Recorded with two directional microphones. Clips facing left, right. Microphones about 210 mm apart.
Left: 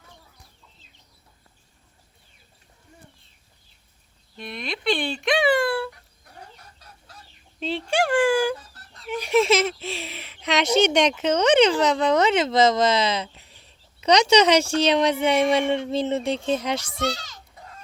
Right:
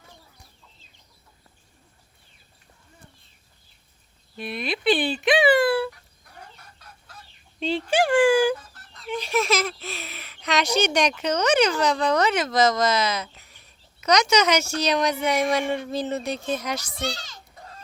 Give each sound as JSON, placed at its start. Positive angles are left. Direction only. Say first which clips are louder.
{"t": 4.4, "sound": "speech", "louder": "right 3 dB", "side_deg": -5}
{"t": 7.6, "sound": "speech", "louder": "right 2 dB", "side_deg": 0}
{"t": 9.0, "sound": "a sound", "louder": "even", "side_deg": 10}
{"t": 9.3, "sound": "speech", "louder": "left 5 dB", "side_deg": 25}